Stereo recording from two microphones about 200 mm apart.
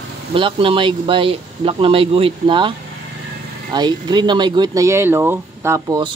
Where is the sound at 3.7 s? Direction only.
20° right (ahead or behind).